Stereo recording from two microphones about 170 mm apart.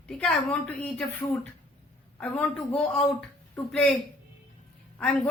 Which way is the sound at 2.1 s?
5° left (ahead or behind).